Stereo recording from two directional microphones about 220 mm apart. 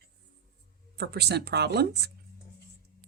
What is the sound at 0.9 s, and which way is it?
Speech, 50° right (ahead or behind).